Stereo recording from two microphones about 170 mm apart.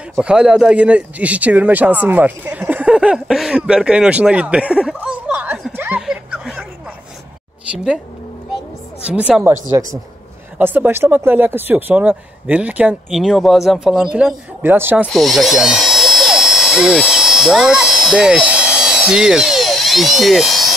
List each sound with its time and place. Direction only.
0.2 s speech: 5° right (ahead or behind)
5.8 s a sound: 5° right (ahead or behind)
7.7 s speech: 5° right (ahead or behind)
9.0 s speech: 5° right (ahead or behind)
9.7 s a man's voice: 20° right (ahead or behind)
15.1 s electric toothbrush: centre (ahead or behind)